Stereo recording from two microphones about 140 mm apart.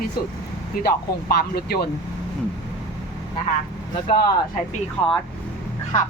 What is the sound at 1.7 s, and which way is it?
Speech, 90° left.